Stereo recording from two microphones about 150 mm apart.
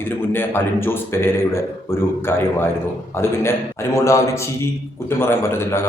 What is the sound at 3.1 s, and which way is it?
A man's voice, 15° left (ahead or behind).